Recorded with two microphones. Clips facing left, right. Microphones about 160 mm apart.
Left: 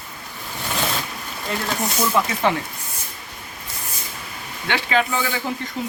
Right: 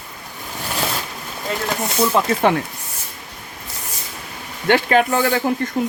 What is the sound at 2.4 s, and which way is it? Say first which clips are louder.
Speech: right 4 dB; 55° right (ahead or behind).